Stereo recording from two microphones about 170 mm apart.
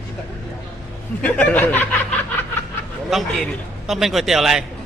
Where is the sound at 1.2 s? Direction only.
10° left (ahead or behind).